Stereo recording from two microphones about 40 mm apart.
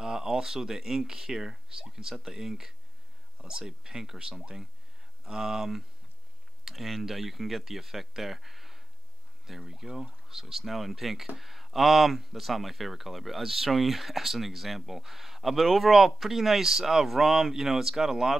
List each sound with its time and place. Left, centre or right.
0.0 s speech: centre